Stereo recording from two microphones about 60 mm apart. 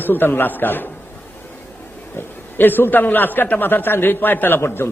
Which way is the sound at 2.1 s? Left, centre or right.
Left.